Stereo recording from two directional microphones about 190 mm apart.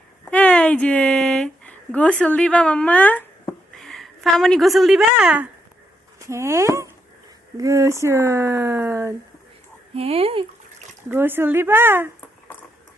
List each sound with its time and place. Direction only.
0.3 s a woman's voice: 5° left (ahead or behind); by 9.1 s 15° right (ahead or behind)
9.9 s speech: 30° right (ahead or behind)
11.1 s speech: 10° right (ahead or behind)